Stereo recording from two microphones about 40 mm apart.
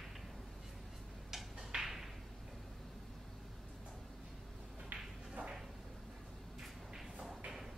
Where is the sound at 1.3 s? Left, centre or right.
Centre.